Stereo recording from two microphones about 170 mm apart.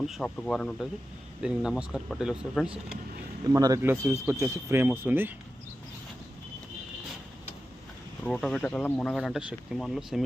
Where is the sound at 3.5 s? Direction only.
20° right (ahead or behind).